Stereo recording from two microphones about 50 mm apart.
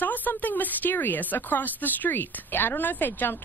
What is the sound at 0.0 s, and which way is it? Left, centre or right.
A woman's voice, left.